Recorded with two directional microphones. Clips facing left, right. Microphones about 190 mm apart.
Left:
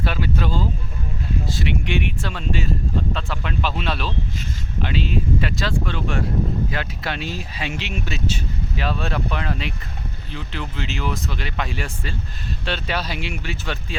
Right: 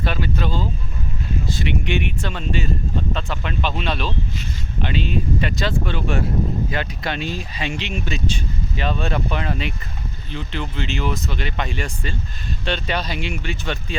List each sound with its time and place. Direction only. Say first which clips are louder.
0.0 s speech: even; 5° left (ahead or behind)